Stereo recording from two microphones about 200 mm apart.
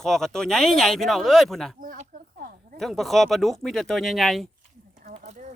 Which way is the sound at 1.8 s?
40° right (ahead or behind).